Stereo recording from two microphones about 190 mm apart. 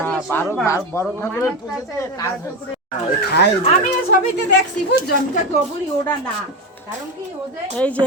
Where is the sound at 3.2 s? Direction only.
55° left (ahead or behind).